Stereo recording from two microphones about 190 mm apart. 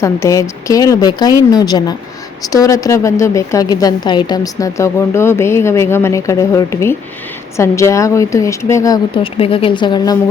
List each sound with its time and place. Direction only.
0.0 s a woman's voice: 15° left (ahead or behind)